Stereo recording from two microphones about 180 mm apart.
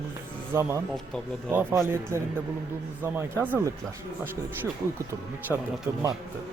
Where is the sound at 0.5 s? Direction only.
15° right (ahead or behind).